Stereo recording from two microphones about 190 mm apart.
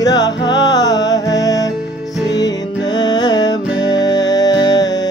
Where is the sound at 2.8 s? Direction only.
20° left (ahead or behind).